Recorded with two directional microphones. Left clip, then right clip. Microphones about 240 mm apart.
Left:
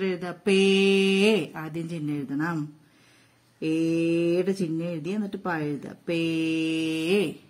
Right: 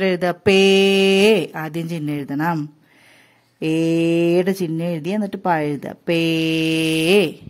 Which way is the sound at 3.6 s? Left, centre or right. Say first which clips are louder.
Right 7 dB; right.